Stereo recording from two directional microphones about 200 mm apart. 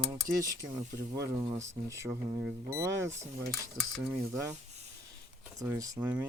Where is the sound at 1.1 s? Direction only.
20° right (ahead or behind).